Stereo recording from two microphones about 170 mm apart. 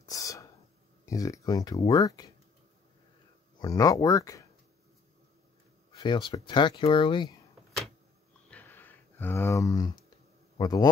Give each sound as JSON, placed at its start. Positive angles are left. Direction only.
{"t": 0.0, "sound": "a sound", "side_deg": 20}
{"t": 1.0, "sound": "speech", "side_deg": 20}
{"t": 3.5, "sound": "speech", "side_deg": 20}
{"t": 5.9, "sound": "speech", "side_deg": 30}
{"t": 8.5, "sound": "a sound", "side_deg": 10}
{"t": 10.6, "sound": "speech", "side_deg": 25}